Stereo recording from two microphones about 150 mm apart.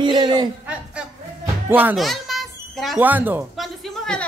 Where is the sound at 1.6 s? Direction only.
10° right (ahead or behind).